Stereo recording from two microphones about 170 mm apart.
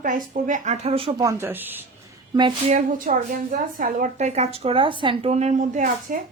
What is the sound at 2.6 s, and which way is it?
A woman's voice, 50° right (ahead or behind).